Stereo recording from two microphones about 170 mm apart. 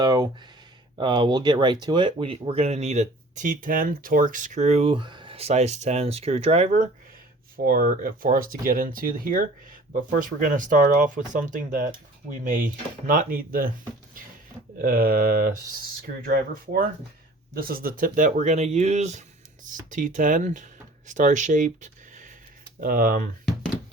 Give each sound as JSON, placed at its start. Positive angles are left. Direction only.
{"t": 0.0, "sound": "a sound", "side_deg": -25}
{"t": 0.9, "sound": "speech", "side_deg": -30}
{"t": 7.5, "sound": "speech", "side_deg": -60}
{"t": 14.8, "sound": "speech", "side_deg": -60}
{"t": 17.5, "sound": "speech", "side_deg": -60}